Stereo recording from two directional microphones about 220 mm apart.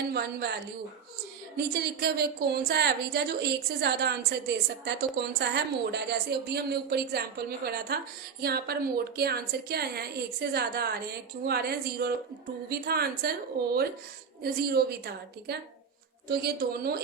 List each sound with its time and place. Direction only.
0.1 s a woman's voice: 45° right (ahead or behind)